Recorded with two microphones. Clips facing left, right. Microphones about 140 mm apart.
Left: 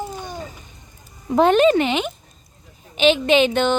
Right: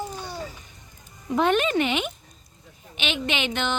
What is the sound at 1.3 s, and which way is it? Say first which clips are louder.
Speech: left 7 dB; 35° left (ahead or behind).